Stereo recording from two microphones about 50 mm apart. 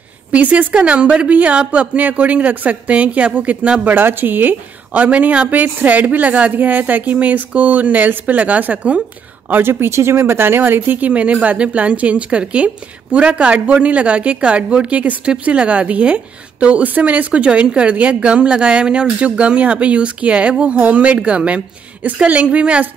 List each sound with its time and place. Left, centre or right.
0.3 s a woman's voice: right
3.8 s a woman's voice: right
9.5 s speech: right